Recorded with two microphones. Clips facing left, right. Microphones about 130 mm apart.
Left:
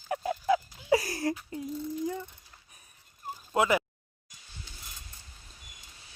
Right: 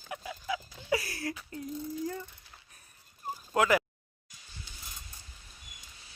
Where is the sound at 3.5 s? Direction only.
25° left (ahead or behind).